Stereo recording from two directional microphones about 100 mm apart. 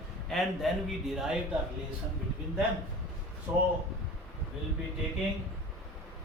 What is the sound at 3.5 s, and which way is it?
Speech, 15° right (ahead or behind).